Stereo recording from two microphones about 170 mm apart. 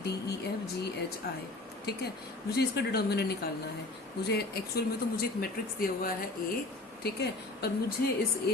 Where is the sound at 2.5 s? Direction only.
70° left (ahead or behind).